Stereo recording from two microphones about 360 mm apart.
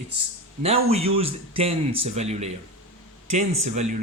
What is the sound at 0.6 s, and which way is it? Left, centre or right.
Speech, centre.